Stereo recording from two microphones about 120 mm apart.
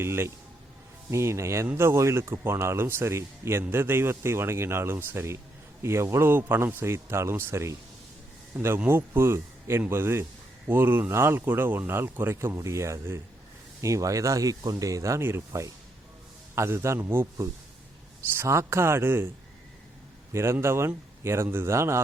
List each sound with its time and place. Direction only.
0.0 s speech: 20° right (ahead or behind)
20.3 s speech: 20° right (ahead or behind)